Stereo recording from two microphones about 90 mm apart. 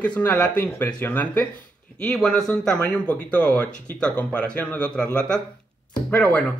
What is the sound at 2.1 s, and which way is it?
Speech, 5° left (ahead or behind).